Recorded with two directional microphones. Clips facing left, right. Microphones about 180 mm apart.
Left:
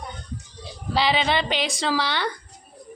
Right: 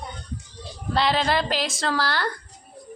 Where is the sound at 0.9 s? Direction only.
Centre (ahead or behind).